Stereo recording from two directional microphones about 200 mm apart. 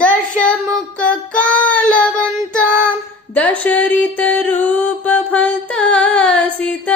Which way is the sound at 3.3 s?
10° left (ahead or behind).